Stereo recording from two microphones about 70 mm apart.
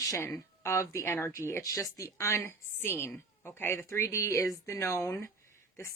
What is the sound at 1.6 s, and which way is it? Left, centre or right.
A woman's voice, left.